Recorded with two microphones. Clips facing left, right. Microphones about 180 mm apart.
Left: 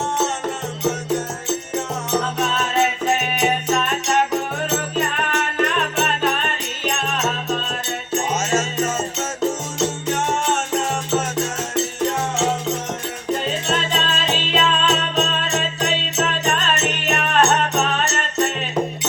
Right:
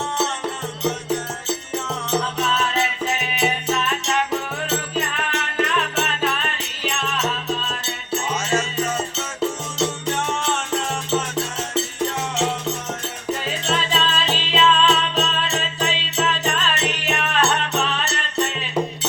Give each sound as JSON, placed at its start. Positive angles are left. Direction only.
{"t": 2.1, "sound": "music", "side_deg": 45}
{"t": 13.7, "sound": "music", "side_deg": 45}